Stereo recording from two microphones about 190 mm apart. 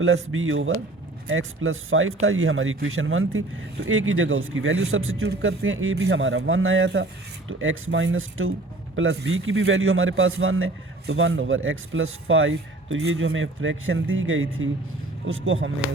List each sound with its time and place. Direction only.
0.0 s speech: 90° right